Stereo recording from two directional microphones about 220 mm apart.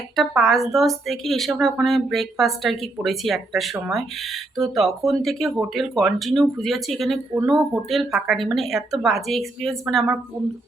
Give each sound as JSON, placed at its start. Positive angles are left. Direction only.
{"t": 0.2, "sound": "speech", "side_deg": 0}